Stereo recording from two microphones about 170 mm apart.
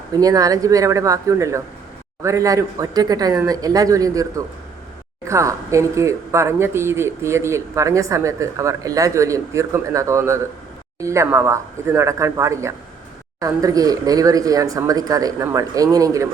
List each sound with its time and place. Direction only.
0.1 s speech: 20° right (ahead or behind)